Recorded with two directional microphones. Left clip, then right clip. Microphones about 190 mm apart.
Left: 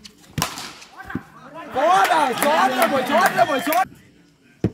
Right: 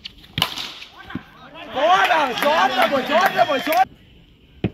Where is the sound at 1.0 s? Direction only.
60° left (ahead or behind).